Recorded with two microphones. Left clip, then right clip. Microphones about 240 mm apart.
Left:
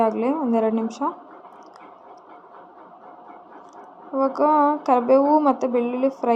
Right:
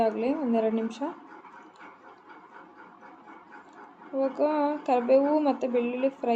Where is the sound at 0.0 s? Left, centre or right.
Centre.